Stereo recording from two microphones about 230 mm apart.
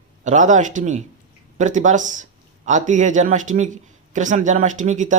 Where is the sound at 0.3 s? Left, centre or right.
Right.